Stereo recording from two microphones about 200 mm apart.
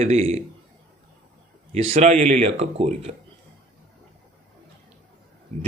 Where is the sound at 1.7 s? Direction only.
30° right (ahead or behind).